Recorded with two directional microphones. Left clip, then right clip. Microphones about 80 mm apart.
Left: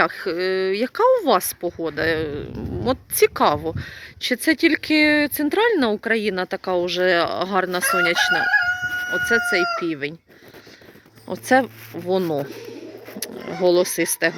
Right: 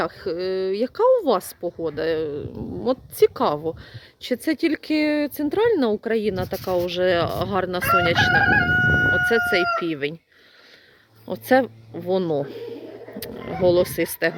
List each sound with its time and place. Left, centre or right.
0.0 s speech: right
6.8 s speech: right
11.3 s speech: right